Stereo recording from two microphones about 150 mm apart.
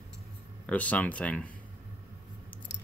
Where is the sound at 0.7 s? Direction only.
10° left (ahead or behind).